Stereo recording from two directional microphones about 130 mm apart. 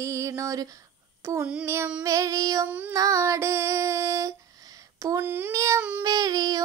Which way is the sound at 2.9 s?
25° right (ahead or behind).